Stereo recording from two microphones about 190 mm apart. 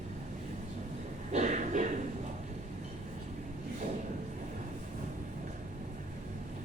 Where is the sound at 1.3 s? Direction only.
40° right (ahead or behind).